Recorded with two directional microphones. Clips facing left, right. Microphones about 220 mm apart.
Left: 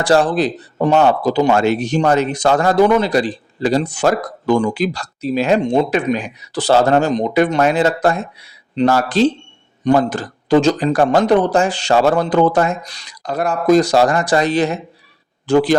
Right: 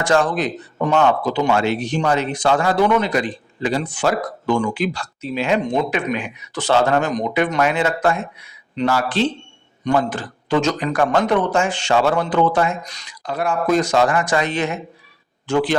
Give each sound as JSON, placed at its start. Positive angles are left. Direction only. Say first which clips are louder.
{"t": 0.0, "sound": "speech", "louder": "left 4 dB", "side_deg": 35}